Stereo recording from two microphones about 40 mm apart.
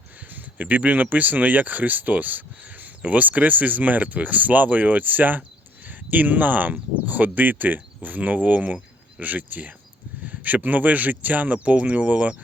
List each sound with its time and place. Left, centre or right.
0.6 s speech: right